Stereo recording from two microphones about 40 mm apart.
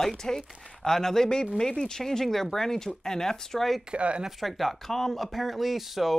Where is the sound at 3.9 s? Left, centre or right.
Right.